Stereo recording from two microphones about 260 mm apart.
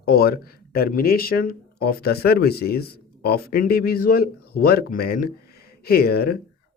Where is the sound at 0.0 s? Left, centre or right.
Left.